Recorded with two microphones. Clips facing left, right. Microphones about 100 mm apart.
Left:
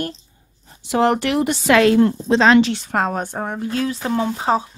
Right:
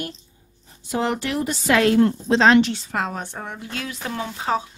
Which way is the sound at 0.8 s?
65° left (ahead or behind).